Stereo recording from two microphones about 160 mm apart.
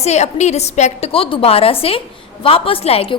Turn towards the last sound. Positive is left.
turn(degrees=35)  # may be behind; listen again after turning